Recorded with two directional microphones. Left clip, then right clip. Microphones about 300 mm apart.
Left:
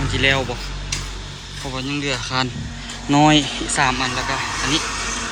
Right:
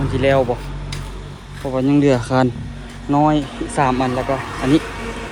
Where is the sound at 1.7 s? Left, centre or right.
Centre.